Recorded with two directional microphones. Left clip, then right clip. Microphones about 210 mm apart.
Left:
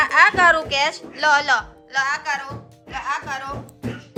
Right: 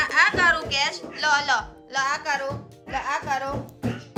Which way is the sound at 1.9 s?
35° right (ahead or behind).